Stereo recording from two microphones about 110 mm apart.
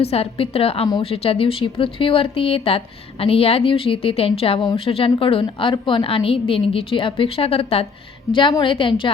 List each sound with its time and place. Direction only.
0.0 s speech: 65° left (ahead or behind)
8.3 s a woman's voice: 50° left (ahead or behind)